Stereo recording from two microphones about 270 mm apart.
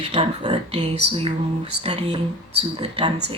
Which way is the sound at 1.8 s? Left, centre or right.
Right.